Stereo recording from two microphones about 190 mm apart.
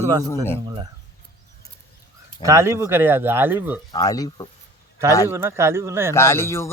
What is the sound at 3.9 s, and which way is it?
Speech, 20° left (ahead or behind).